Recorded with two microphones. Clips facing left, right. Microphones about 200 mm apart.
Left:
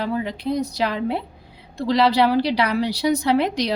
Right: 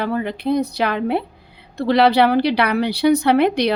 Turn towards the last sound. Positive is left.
turn(degrees=-65)  # may be behind; listen again after turning